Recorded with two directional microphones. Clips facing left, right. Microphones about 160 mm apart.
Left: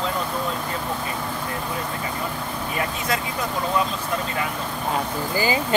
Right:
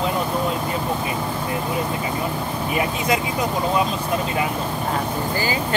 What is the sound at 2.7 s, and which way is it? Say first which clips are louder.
Speech: right 5 dB; 15° right (ahead or behind).